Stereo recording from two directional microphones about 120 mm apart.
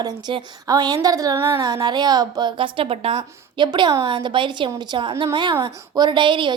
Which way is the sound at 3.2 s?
40° right (ahead or behind).